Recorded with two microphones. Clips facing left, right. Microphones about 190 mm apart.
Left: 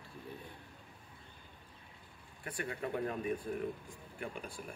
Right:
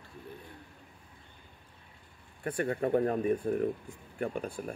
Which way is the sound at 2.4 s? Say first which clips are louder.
Right 9 dB; 50° right (ahead or behind).